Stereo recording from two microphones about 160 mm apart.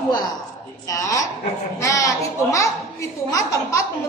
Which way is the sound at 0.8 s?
20° left (ahead or behind).